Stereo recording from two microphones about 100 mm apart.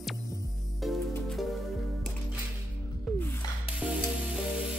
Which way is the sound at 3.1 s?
Centre (ahead or behind).